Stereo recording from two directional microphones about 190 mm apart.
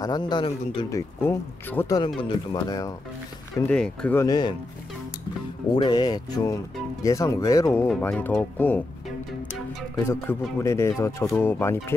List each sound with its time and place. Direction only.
0.0 s speech: 20° left (ahead or behind)
2.0 s speech: 25° left (ahead or behind)
3.5 s speech: 5° left (ahead or behind)
5.7 s speech: 20° left (ahead or behind)
10.0 s speech: 15° left (ahead or behind)